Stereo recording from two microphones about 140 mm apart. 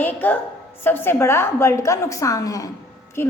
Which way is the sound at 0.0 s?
15° left (ahead or behind).